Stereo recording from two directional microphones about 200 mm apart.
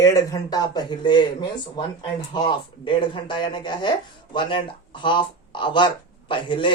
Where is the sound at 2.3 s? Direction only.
25° left (ahead or behind).